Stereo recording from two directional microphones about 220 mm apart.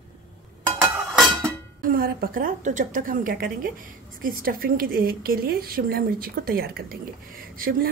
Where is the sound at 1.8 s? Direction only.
40° right (ahead or behind).